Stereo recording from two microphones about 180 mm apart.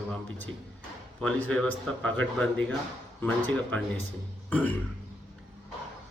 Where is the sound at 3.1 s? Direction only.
10° left (ahead or behind).